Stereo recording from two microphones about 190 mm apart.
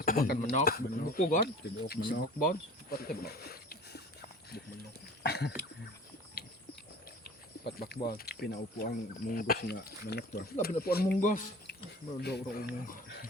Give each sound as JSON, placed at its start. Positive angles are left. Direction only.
{"t": 0.0, "sound": "speech", "side_deg": 50}
{"t": 1.9, "sound": "speech", "side_deg": 55}
{"t": 5.2, "sound": "speech", "side_deg": 60}
{"t": 7.6, "sound": "speech", "side_deg": 55}
{"t": 12.2, "sound": "speech", "side_deg": 55}